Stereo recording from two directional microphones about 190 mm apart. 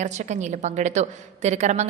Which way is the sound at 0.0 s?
40° right (ahead or behind).